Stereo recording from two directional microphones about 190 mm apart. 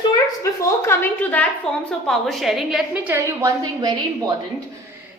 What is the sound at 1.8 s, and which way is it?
A woman's voice, centre (ahead or behind).